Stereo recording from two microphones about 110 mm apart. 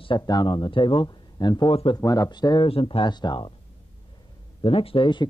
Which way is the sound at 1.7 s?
60° left (ahead or behind).